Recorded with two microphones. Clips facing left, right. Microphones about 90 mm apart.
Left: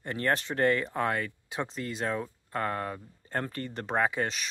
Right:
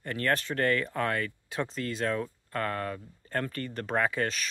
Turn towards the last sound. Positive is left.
turn(degrees=20)  # may be behind; listen again after turning